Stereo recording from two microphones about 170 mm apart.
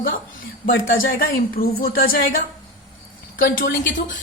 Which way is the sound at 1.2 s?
60° left (ahead or behind).